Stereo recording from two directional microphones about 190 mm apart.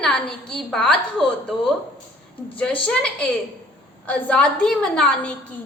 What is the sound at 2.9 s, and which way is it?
A woman's voice, 5° left (ahead or behind).